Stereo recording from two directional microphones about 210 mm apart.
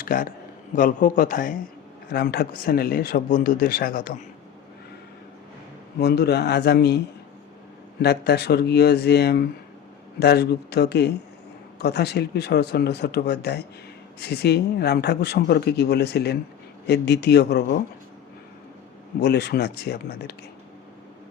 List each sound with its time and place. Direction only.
0.0 s speech: 40° left (ahead or behind)
6.0 s speech: 50° left (ahead or behind)
8.0 s speech: 50° left (ahead or behind)
19.2 s speech: 50° left (ahead or behind)